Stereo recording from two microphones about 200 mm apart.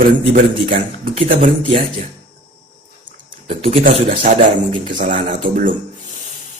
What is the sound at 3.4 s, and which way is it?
Speech, 30° right (ahead or behind).